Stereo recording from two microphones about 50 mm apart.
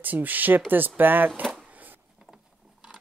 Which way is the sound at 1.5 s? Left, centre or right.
Right.